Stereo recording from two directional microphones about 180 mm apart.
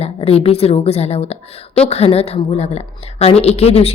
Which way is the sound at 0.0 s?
35° left (ahead or behind).